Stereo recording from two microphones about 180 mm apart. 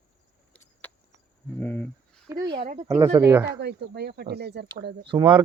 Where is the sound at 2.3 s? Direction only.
25° right (ahead or behind).